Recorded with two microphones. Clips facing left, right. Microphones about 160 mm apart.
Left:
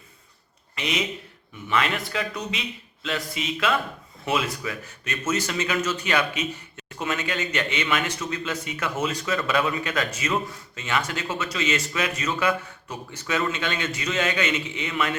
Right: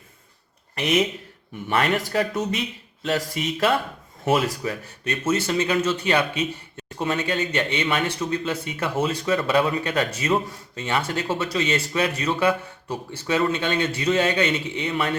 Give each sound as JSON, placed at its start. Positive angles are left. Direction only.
{"t": 0.8, "sound": "speech", "side_deg": -50}